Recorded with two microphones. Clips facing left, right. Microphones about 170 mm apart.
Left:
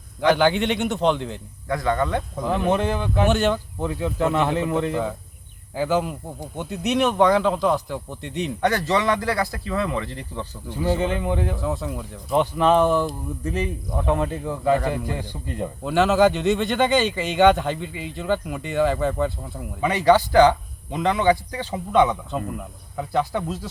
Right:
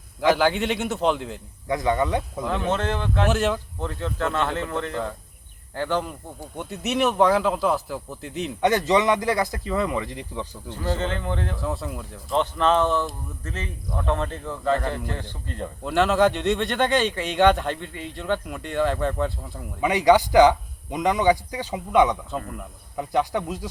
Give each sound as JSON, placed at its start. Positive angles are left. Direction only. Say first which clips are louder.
{"t": 0.2, "sound": "speech", "louder": "left 2 dB", "side_deg": 0}
{"t": 1.6, "sound": "a man's voice", "louder": "even", "side_deg": -20}
{"t": 2.5, "sound": "speech", "louder": "left 4 dB", "side_deg": 10}
{"t": 3.2, "sound": "speech", "louder": "left 3 dB", "side_deg": 0}
{"t": 3.8, "sound": "speech", "louder": "left 4 dB", "side_deg": 10}
{"t": 8.6, "sound": "speech", "louder": "right 2 dB", "side_deg": -20}
{"t": 10.7, "sound": "speech", "louder": "left 5 dB", "side_deg": 10}
{"t": 11.6, "sound": "speech", "louder": "left 2 dB", "side_deg": 0}
{"t": 12.3, "sound": "speech", "louder": "left 3 dB", "side_deg": 10}
{"t": 15.8, "sound": "speech", "louder": "left 2 dB", "side_deg": 0}
{"t": 19.8, "sound": "a man's voice", "louder": "even", "side_deg": -15}
{"t": 22.0, "sound": "speech", "louder": "left 1 dB", "side_deg": 5}
{"t": 23.0, "sound": "a man's voice", "louder": "even", "side_deg": -15}